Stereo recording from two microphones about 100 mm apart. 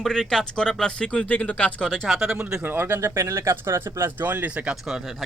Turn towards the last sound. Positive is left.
turn(degrees=0)  # may be behind; listen again after turning